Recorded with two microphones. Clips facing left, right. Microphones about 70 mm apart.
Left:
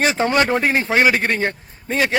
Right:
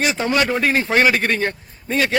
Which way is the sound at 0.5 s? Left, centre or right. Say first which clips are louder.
Even; left.